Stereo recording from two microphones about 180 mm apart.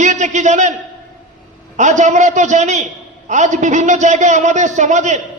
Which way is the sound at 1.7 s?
40° right (ahead or behind).